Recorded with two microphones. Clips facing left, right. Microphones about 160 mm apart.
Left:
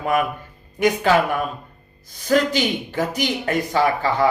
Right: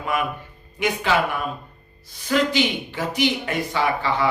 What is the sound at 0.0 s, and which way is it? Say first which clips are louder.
A man's voice: left 4 dB; 45° left (ahead or behind).